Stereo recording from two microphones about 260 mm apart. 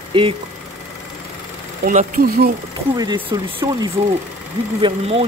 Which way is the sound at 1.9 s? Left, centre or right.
Right.